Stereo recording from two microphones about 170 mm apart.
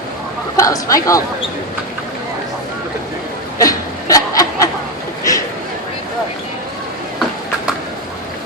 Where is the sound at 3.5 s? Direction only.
20° left (ahead or behind).